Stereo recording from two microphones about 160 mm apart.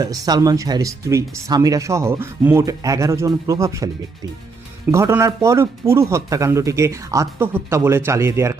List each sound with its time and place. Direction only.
0.0 s speech: 25° right (ahead or behind)
4.9 s speech: 15° right (ahead or behind)